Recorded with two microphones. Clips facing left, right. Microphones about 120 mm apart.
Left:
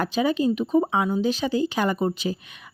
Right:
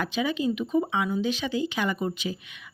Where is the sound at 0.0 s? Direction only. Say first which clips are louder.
Left 5 dB; 40° left (ahead or behind).